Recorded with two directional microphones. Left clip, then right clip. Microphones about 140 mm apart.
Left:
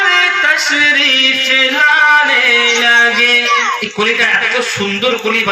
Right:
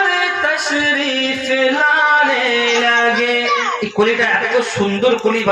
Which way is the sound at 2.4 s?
40° right (ahead or behind).